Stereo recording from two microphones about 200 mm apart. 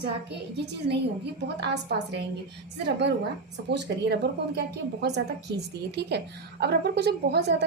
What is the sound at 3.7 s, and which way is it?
A woman's voice, 55° right (ahead or behind).